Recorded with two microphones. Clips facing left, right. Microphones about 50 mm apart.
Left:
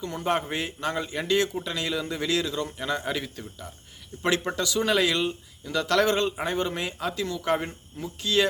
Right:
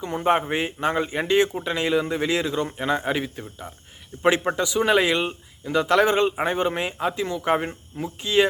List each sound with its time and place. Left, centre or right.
0.0 s a man's voice: right